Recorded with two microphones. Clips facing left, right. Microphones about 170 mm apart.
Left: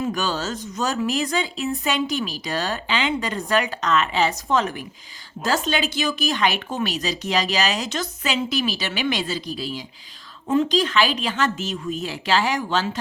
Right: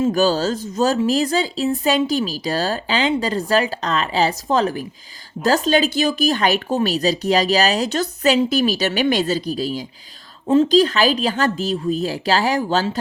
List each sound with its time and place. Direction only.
0.1 s a woman's voice: 35° right (ahead or behind)